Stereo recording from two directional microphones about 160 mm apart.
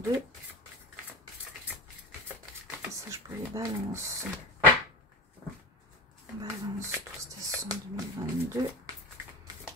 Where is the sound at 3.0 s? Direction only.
20° right (ahead or behind).